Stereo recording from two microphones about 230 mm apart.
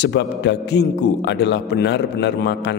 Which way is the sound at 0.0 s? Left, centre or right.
Left.